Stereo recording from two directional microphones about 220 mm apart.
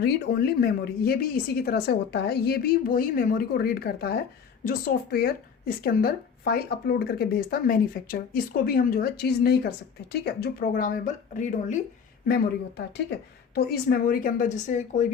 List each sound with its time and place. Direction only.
0.0 s speech: 45° left (ahead or behind)
12.3 s a woman's voice: 50° left (ahead or behind); by 15.0 s 35° left (ahead or behind)